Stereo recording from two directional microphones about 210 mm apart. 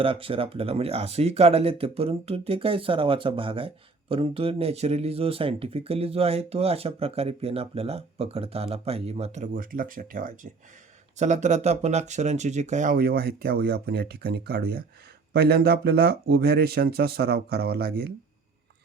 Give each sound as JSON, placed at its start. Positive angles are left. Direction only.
{"t": 0.0, "sound": "speech", "side_deg": -25}